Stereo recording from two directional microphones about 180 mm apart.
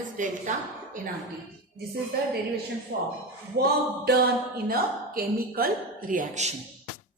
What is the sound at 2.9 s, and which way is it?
Speech, 60° right (ahead or behind).